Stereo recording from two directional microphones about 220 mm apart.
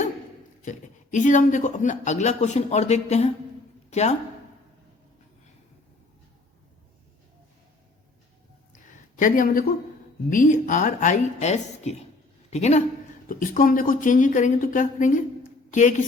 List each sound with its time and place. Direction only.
0.6 s speech: 35° left (ahead or behind)
8.7 s a sound: 35° left (ahead or behind)
10.2 s a woman's voice: 35° left (ahead or behind)